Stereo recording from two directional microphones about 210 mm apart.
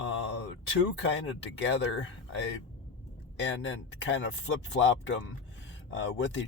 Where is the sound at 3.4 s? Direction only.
60° left (ahead or behind).